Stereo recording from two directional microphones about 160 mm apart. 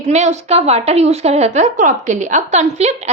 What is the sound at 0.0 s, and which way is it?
A woman's voice, 45° right (ahead or behind).